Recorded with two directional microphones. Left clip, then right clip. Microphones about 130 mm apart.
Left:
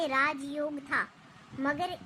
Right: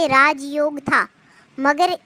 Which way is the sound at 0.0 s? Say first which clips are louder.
Right 14 dB; 45° right (ahead or behind).